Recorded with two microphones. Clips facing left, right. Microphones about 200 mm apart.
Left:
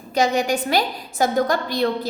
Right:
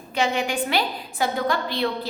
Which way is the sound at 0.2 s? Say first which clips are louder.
Left 4 dB; 40° left (ahead or behind).